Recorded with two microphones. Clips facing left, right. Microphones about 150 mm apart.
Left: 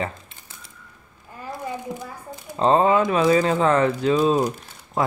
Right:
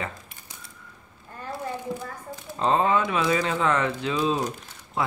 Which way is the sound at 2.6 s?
40° left (ahead or behind).